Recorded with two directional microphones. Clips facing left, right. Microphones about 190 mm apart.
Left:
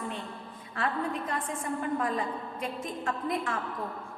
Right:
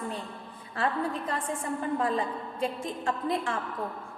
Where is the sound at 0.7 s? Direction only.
30° right (ahead or behind).